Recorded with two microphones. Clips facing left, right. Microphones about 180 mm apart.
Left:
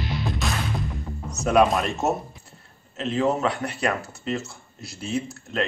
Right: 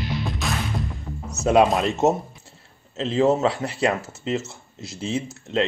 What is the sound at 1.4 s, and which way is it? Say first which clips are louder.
Speech: right 2 dB; 25° right (ahead or behind).